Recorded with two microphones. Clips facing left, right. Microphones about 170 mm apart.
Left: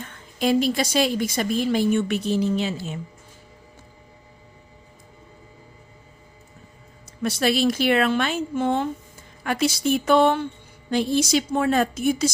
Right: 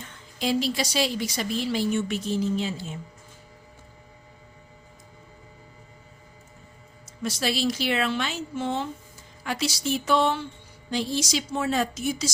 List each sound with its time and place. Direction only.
0.0 s a woman's voice: 55° left (ahead or behind); by 3.0 s 75° left (ahead or behind)
7.2 s speech: 60° left (ahead or behind)